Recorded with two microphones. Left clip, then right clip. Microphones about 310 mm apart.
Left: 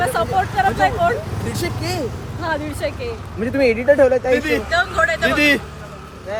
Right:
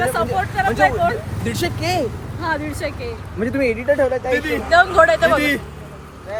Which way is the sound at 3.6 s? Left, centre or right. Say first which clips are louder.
Left 5 dB; left.